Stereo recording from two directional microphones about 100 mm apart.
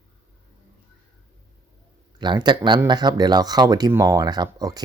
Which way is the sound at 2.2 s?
50° right (ahead or behind).